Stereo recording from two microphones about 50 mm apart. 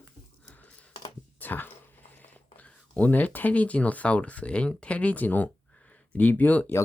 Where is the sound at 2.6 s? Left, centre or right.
Left.